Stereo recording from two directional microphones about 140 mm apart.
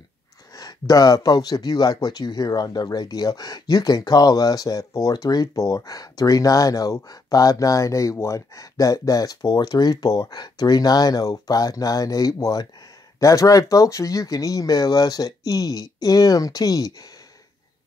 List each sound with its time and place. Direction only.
0.6 s speech: 25° left (ahead or behind)